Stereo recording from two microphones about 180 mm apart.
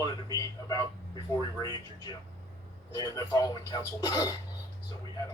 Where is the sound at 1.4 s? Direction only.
20° left (ahead or behind).